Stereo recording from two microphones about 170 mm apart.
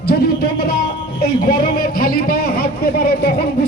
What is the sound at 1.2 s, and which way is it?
A man's voice, 60° left (ahead or behind).